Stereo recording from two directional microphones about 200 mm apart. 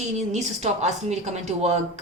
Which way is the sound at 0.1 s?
35° right (ahead or behind).